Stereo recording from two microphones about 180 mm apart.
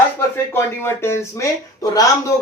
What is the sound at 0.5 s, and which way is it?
Speech, 15° left (ahead or behind).